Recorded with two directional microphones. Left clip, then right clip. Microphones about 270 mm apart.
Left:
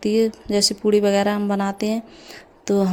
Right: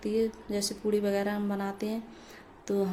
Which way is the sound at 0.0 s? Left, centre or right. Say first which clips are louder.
Left 10 dB; left.